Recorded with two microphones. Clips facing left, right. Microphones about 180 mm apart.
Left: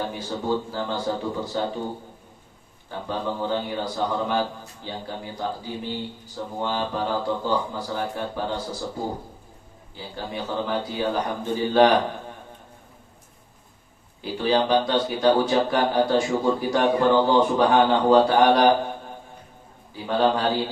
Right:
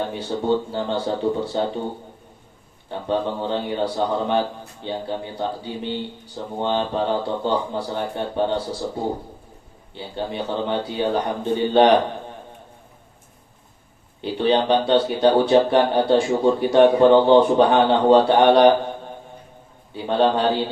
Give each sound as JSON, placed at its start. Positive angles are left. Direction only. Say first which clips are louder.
{"t": 0.1, "sound": "a man's voice", "louder": "right 4 dB", "side_deg": -30}
{"t": 2.9, "sound": "a man's voice", "louder": "right 5 dB", "side_deg": -30}
{"t": 9.9, "sound": "a man's voice", "louder": "right 5 dB", "side_deg": -30}
{"t": 14.2, "sound": "a man's voice", "louder": "right 3 dB", "side_deg": -30}
{"t": 19.9, "sound": "a man's voice", "louder": "right 3 dB", "side_deg": -30}